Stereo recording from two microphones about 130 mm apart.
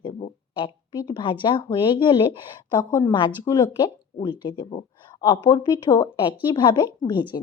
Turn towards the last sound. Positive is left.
turn(degrees=35)  # may be behind; listen again after turning